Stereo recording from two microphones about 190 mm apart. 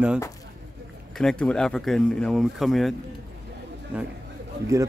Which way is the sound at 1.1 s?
5° left (ahead or behind).